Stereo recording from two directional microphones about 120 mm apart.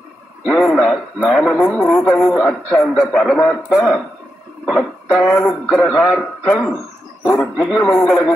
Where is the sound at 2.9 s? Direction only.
Centre (ahead or behind).